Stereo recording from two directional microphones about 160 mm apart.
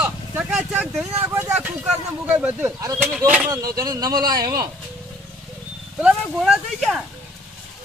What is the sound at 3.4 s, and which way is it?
Speech, 20° right (ahead or behind).